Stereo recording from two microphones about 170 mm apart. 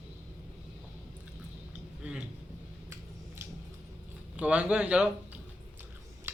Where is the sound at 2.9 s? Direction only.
15° right (ahead or behind).